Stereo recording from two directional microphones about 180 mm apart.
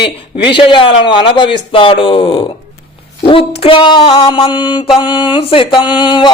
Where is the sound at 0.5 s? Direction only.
25° left (ahead or behind).